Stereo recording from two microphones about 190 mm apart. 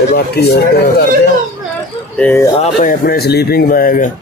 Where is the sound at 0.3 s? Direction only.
55° left (ahead or behind).